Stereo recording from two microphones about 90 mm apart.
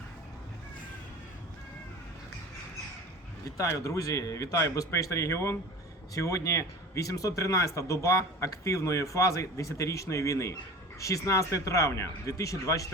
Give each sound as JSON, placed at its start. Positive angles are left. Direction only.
{"t": 3.4, "sound": "speech", "side_deg": 35}